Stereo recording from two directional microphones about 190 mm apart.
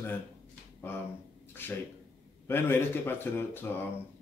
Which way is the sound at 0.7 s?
10° left (ahead or behind).